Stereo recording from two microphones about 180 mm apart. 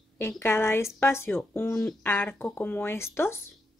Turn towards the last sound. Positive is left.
turn(degrees=15)  # may be behind; listen again after turning